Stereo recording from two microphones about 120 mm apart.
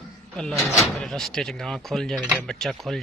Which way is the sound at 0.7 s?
Centre (ahead or behind).